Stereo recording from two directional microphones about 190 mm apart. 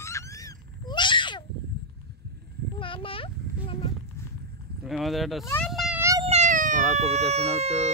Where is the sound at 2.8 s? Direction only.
30° left (ahead or behind).